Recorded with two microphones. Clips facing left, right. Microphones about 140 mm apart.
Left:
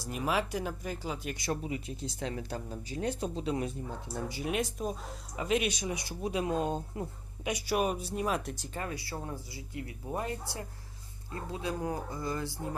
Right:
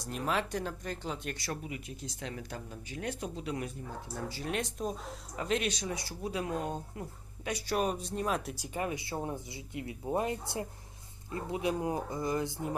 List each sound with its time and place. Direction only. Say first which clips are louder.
0.0 s speech: left 1 dB; 5° left (ahead or behind)
1.4 s speech: left 5 dB; 25° left (ahead or behind)
4.3 s speech: left 3 dB; 10° left (ahead or behind)
7.4 s speech: left 1 dB; 10° left (ahead or behind)
8.5 s speech: right 3 dB; 10° right (ahead or behind)